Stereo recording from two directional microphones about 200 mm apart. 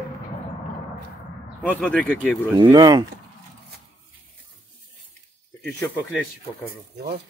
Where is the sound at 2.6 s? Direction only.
20° right (ahead or behind).